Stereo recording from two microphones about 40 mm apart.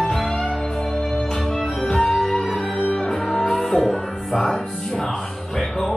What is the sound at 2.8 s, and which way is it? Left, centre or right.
Music, left.